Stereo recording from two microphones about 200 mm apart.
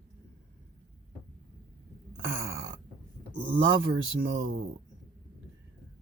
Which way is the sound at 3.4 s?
65° right (ahead or behind).